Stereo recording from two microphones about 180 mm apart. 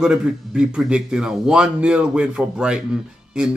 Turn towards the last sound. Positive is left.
turn(degrees=-5)  # may be behind; listen again after turning